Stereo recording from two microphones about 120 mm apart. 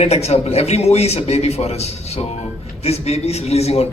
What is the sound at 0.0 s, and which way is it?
A man's voice, 60° left (ahead or behind).